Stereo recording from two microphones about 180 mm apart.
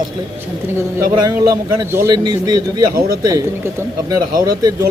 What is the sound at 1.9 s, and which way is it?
Speech, 20° right (ahead or behind).